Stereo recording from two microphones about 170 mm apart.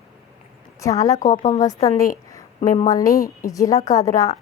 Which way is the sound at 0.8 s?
20° left (ahead or behind).